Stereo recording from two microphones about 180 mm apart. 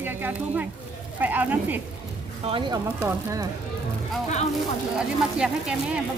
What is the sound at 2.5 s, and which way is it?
Speech, 25° right (ahead or behind).